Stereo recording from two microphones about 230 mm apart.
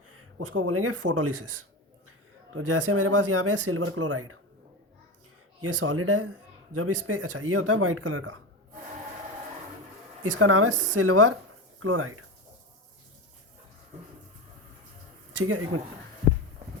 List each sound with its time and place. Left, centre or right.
0.2 s speech: right
2.6 s speech: right
5.6 s speech: right
10.2 s speech: right
15.4 s speech: right